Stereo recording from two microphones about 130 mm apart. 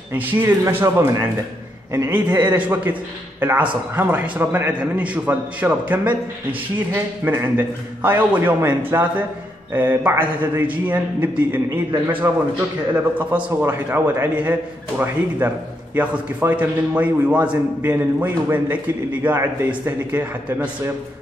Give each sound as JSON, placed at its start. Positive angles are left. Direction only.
{"t": 0.1, "sound": "a man's voice", "side_deg": -15}